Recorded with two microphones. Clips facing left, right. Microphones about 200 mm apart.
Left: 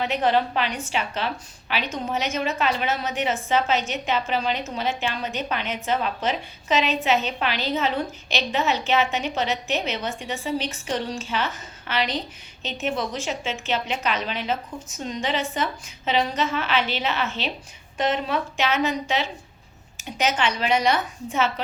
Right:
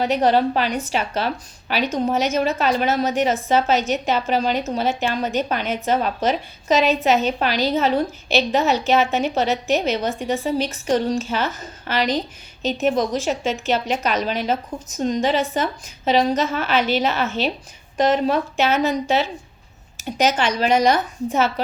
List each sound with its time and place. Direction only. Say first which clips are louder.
0.0 s a woman's voice: right 5 dB; 40° right (ahead or behind)